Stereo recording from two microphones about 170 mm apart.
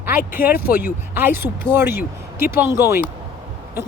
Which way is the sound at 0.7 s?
10° right (ahead or behind).